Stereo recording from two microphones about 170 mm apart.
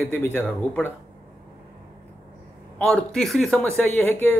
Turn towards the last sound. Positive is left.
turn(degrees=10)  # may be behind; listen again after turning